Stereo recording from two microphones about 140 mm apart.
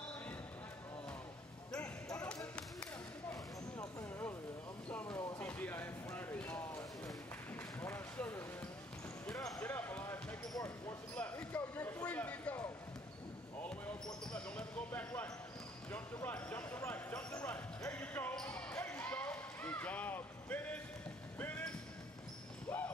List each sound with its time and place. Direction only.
1.7 s basketball bounce: 5° left (ahead or behind)
3.3 s clip-clop: 20° left (ahead or behind)
4.8 s vehicle: 10° left (ahead or behind)
5.4 s a sound: 15° left (ahead or behind)
7.8 s a sound: 15° left (ahead or behind)
9.3 s basketball bounce: 25° left (ahead or behind)
10.5 s basketball bounce: 25° left (ahead or behind)
11.1 s basketball bounce: 10° left (ahead or behind)
12.1 s a sound: 10° left (ahead or behind)
14.2 s basketball bounce: 5° left (ahead or behind)
21.4 s train: 15° left (ahead or behind)
22.7 s clip-clop: 10° left (ahead or behind)